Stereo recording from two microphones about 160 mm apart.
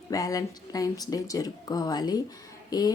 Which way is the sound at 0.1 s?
20° left (ahead or behind).